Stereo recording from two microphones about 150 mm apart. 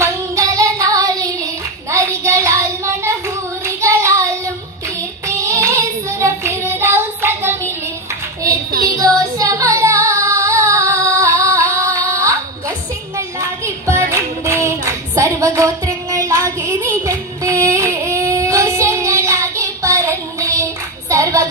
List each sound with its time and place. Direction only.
0.0 s child singing: 20° right (ahead or behind)
8.9 s child singing: 25° right (ahead or behind)